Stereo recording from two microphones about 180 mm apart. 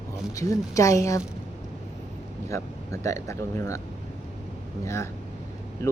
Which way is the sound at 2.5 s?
15° left (ahead or behind).